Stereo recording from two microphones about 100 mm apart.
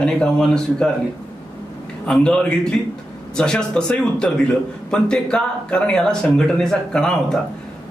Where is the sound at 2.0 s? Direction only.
10° left (ahead or behind).